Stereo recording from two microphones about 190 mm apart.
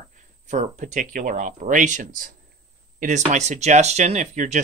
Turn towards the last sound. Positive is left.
turn(degrees=-40)  # may be behind; listen again after turning